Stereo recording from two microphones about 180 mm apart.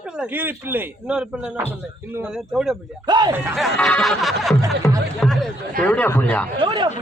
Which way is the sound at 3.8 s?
5° left (ahead or behind).